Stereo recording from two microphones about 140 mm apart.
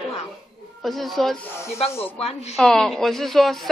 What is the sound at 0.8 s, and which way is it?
Speech, centre (ahead or behind).